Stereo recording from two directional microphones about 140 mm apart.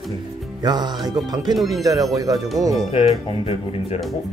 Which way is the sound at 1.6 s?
Centre (ahead or behind).